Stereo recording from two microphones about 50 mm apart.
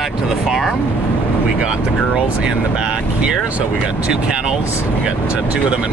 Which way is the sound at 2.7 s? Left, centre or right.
Centre.